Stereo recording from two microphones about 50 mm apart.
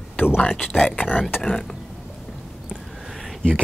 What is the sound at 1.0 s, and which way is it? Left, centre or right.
Speech, left.